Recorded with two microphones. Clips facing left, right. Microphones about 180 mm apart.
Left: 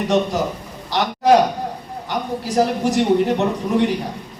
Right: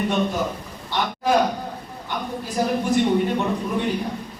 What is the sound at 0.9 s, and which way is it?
Speech, 90° left.